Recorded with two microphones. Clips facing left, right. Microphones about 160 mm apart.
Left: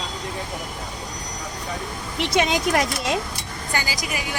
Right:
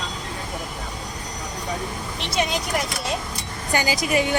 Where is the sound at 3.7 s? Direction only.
25° right (ahead or behind).